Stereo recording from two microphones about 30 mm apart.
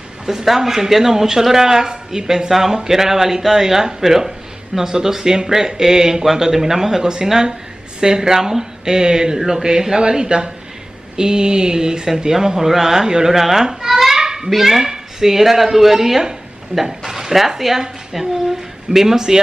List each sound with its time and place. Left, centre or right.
0.3 s speech: centre
14.5 s speech: centre